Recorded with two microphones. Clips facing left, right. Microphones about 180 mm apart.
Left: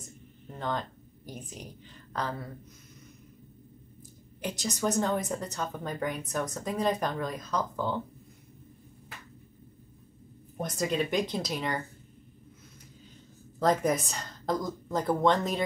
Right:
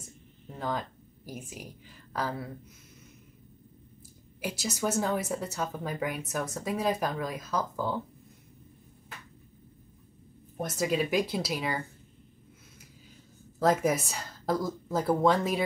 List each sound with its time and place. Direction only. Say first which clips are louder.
0.5 s speech: even; 5° right (ahead or behind)
4.4 s speech: even; 5° right (ahead or behind)
10.6 s a woman's voice: right 1 dB; 5° right (ahead or behind)
13.6 s a woman's voice: even; 5° right (ahead or behind)